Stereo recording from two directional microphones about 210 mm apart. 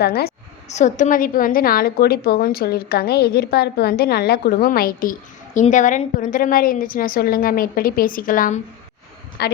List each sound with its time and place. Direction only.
0.0 s a woman's voice: 50° left (ahead or behind)
0.7 s a woman's voice: 35° left (ahead or behind)
9.4 s a woman's voice: 50° left (ahead or behind)